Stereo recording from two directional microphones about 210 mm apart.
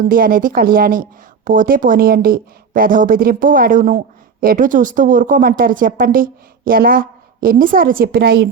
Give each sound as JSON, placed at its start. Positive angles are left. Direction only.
{"t": 0.0, "sound": "a woman's voice", "side_deg": -40}